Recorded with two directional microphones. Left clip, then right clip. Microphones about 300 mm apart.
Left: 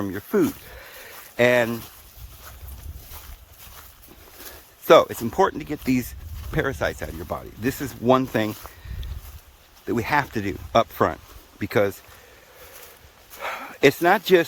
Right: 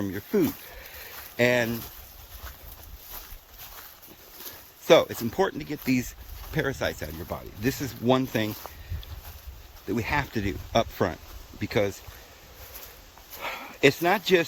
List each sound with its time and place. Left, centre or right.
0.0 s speech: centre
4.9 s speech: centre
9.8 s speech: centre
13.4 s bow-wow: centre